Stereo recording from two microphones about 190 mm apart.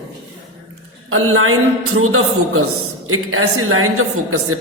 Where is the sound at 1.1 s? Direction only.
90° right.